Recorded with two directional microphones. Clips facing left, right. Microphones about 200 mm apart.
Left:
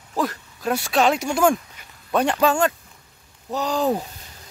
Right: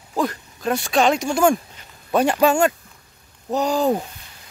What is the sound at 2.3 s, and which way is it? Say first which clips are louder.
Speech: right 3 dB; 10° right (ahead or behind).